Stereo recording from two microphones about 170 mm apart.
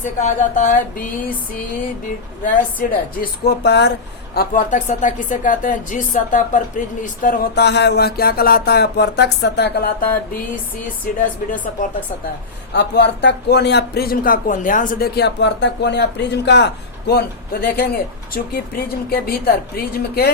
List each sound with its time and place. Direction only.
0.0 s speech: 50° left (ahead or behind)
2.4 s speech: 55° left (ahead or behind)
3.6 s speech: 80° left
4.4 s speech: 50° left (ahead or behind)
7.6 s speech: 80° left
12.7 s speech: 80° left
17.1 s speech: 65° left (ahead or behind)